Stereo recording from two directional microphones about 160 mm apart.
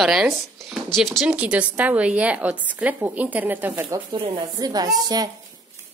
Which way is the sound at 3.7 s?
30° right (ahead or behind).